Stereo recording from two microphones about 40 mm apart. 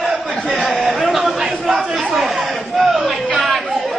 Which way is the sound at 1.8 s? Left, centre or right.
Centre.